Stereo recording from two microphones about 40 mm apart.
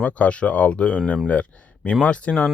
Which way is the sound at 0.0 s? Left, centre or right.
Left.